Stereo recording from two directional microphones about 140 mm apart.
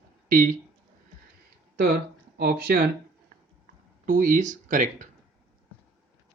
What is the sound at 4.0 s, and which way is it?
Speech, 75° right (ahead or behind).